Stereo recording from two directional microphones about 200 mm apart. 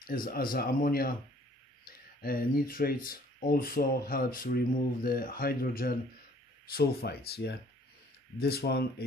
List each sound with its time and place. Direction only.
0.0 s speech: 45° left (ahead or behind)